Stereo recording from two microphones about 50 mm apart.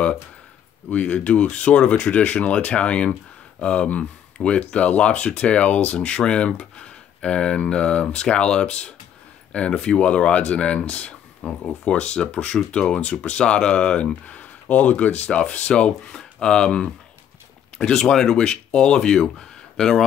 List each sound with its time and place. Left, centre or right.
0.8 s speech: left; by 20.1 s centre